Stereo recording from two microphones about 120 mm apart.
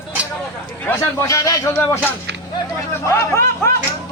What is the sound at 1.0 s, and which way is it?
Speech, 30° left (ahead or behind).